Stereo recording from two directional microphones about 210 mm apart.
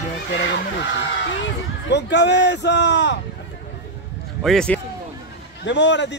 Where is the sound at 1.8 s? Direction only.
55° left (ahead or behind).